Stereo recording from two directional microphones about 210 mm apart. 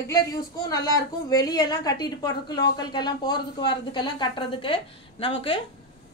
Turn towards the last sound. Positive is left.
turn(degrees=25)  # may be behind; listen again after turning